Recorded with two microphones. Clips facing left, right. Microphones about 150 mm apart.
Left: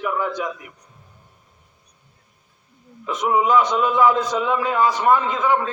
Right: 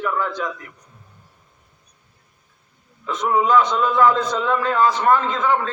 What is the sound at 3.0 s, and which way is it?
A man's voice, 10° left (ahead or behind).